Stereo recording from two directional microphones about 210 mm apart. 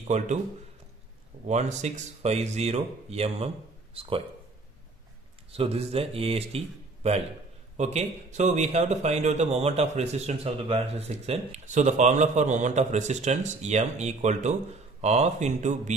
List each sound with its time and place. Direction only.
0.1 s a man's voice: 35° right (ahead or behind)
1.5 s a man's voice: 35° right (ahead or behind)
5.5 s a man's voice: 30° right (ahead or behind)